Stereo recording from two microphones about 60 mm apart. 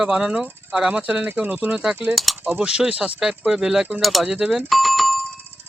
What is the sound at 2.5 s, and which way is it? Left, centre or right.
Speech, centre.